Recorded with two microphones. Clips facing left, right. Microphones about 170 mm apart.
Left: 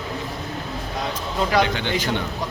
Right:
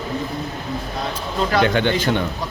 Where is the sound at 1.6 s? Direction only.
55° right (ahead or behind).